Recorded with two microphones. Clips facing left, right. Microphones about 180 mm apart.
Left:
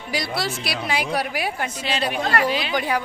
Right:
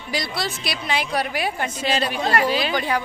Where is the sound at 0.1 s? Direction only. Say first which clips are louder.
Left 1 dB; 10° left (ahead or behind).